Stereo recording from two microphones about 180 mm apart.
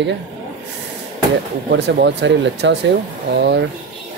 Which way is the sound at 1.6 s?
75° right (ahead or behind).